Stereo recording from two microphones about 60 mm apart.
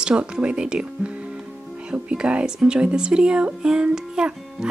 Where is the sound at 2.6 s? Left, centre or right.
Centre.